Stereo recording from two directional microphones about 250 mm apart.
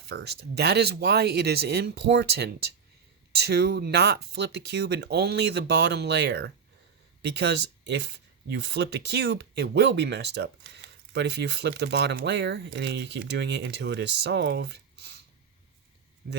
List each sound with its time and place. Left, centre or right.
0.1 s speech: right
16.2 s speech: right